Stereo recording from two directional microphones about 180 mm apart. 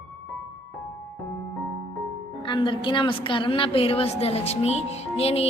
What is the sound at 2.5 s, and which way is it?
A woman's voice, 25° left (ahead or behind).